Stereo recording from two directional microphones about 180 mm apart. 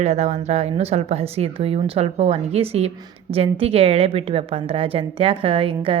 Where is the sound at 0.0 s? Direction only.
40° right (ahead or behind).